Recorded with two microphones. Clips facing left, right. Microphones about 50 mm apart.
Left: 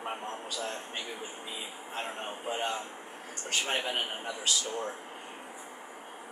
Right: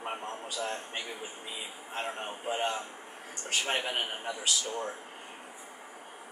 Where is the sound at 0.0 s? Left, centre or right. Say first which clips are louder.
Even; centre.